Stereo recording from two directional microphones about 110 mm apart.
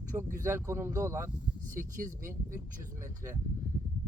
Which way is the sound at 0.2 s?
25° right (ahead or behind).